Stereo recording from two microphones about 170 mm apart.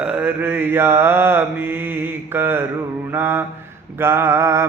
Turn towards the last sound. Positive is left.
turn(degrees=-15)  # may be behind; listen again after turning